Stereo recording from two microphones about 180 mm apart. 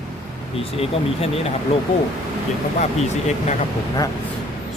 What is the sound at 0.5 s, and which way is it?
Speech, 30° left (ahead or behind).